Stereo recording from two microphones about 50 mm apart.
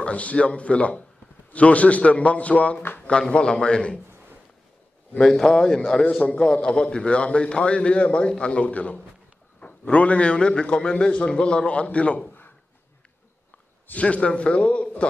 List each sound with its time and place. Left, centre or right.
0.0 s a man's voice: left
5.3 s a man's voice: centre
13.9 s a man's voice: left